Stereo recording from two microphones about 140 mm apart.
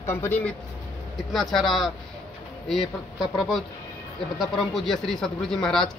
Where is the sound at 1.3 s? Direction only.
Centre (ahead or behind).